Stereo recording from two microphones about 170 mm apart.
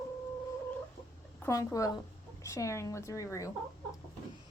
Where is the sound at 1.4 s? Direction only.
15° left (ahead or behind).